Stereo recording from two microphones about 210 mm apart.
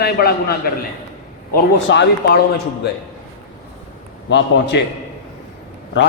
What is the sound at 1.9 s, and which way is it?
Speech, 55° left (ahead or behind).